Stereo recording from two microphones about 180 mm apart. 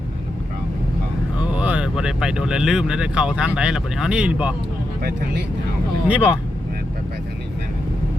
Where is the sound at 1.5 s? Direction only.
5° right (ahead or behind).